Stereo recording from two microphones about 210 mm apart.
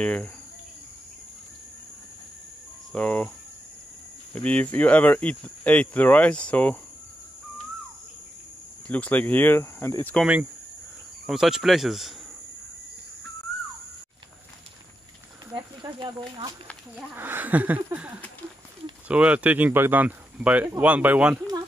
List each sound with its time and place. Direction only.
0.0 s speech: 5° left (ahead or behind)
2.9 s cricket: 5° left (ahead or behind)
4.3 s speech: 5° left (ahead or behind)
8.8 s speech: 5° left (ahead or behind)
11.2 s speech: centre (ahead or behind)
15.5 s speech: 20° right (ahead or behind)
16.9 s speech: 10° right (ahead or behind)